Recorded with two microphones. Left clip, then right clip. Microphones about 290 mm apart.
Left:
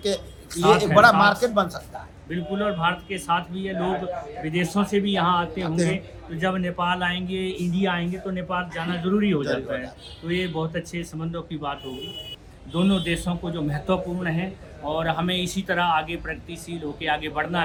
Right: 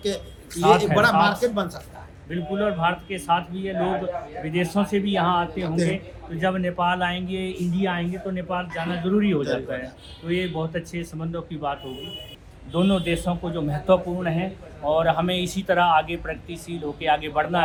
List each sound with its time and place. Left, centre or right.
0.0 s a man's voice: centre
2.3 s a man's voice: centre
5.6 s speech: centre
5.9 s a man's voice: centre